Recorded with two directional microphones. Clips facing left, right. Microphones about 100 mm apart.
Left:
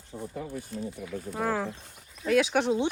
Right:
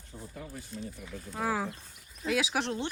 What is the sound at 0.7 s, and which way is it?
Speech, 60° left (ahead or behind).